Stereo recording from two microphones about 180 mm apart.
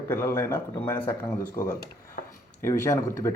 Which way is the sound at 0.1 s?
15° left (ahead or behind).